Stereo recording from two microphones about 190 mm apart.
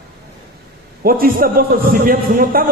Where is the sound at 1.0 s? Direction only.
50° right (ahead or behind).